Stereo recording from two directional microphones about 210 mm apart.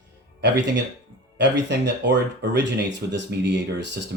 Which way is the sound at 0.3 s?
55° right (ahead or behind).